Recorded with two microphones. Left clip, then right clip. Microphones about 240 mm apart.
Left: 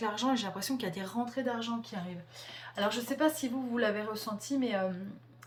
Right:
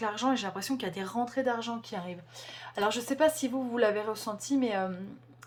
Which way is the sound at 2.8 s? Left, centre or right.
Right.